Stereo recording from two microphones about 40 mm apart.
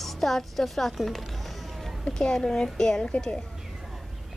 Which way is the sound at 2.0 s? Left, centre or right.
Centre.